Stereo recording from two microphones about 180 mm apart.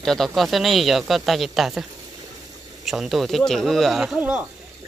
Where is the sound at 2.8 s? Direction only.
Centre (ahead or behind).